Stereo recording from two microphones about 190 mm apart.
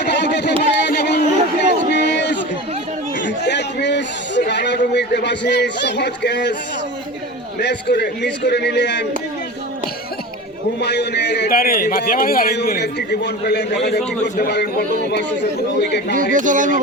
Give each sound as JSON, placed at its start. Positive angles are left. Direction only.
{"t": 0.0, "sound": "a sound", "side_deg": 65}
{"t": 4.9, "sound": "a man's voice", "side_deg": 65}
{"t": 7.6, "sound": "a man's voice", "side_deg": 60}
{"t": 10.8, "sound": "a man's voice", "side_deg": 65}
{"t": 16.3, "sound": "speech", "side_deg": -45}